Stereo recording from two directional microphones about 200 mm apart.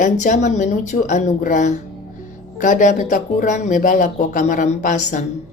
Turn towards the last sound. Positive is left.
turn(degrees=40)  # may be behind; listen again after turning